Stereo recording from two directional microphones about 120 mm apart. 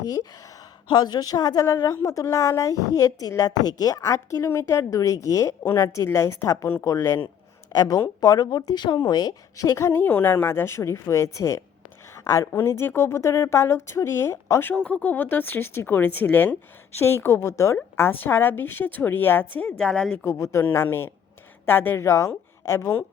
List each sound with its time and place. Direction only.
0.0 s a woman's voice: 30° left (ahead or behind)
14.7 s a woman's voice: 10° left (ahead or behind)
20.2 s a woman's voice: 25° left (ahead or behind)